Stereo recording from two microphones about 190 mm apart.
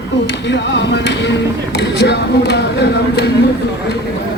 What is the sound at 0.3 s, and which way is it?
Speech, 70° left (ahead or behind).